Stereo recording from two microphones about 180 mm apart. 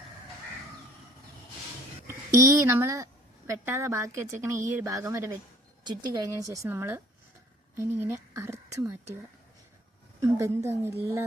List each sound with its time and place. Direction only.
2.0 s a woman's voice: 15° right (ahead or behind)
10.2 s a woman's voice: 20° right (ahead or behind)